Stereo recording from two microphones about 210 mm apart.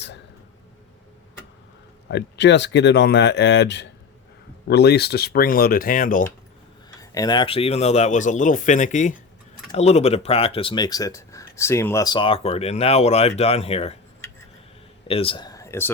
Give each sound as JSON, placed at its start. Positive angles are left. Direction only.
{"t": 2.0, "sound": "speech", "side_deg": 55}
{"t": 7.0, "sound": "speech", "side_deg": 15}
{"t": 15.0, "sound": "speech", "side_deg": 25}